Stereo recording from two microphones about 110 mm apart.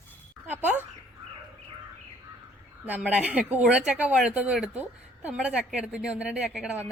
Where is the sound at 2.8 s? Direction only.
15° right (ahead or behind).